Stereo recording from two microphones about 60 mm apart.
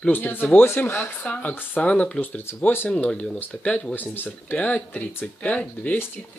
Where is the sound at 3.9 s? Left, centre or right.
Left.